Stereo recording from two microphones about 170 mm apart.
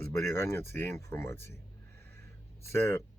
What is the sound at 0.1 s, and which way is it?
Speech, 15° left (ahead or behind).